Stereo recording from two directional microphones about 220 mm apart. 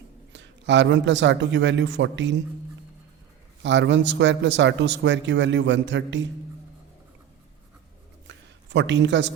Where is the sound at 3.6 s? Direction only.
55° right (ahead or behind).